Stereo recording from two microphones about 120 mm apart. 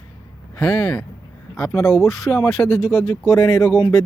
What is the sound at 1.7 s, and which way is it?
Speech, 20° left (ahead or behind).